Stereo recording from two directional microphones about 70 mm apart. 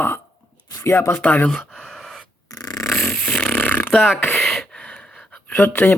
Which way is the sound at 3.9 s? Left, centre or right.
Centre.